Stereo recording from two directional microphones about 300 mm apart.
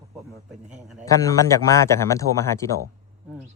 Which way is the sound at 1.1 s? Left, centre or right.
Centre.